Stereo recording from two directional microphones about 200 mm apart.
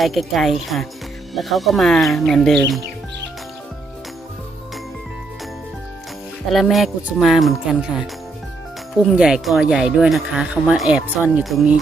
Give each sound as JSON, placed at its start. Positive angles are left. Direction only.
{"t": 0.0, "sound": "speech", "side_deg": 0}
{"t": 6.5, "sound": "speech", "side_deg": 0}